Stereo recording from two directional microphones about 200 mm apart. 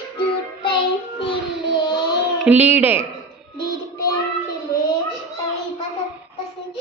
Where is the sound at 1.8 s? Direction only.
55° left (ahead or behind).